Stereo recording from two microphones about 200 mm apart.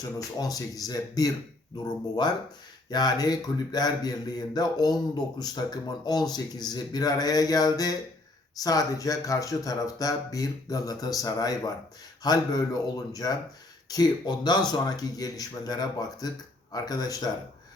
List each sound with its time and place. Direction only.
0.0 s speech: 20° left (ahead or behind)
2.9 s a man's voice: 20° left (ahead or behind)